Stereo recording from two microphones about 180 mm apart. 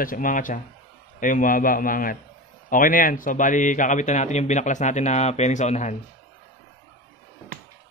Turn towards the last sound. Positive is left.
turn(degrees=40)  # may be behind; listen again after turning